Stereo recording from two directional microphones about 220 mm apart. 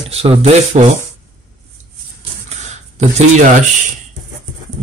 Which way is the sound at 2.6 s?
30° right (ahead or behind).